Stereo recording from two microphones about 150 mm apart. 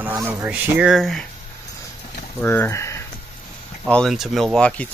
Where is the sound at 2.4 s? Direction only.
15° left (ahead or behind).